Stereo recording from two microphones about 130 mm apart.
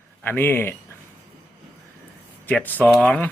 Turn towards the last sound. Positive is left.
turn(degrees=10)  # may be behind; listen again after turning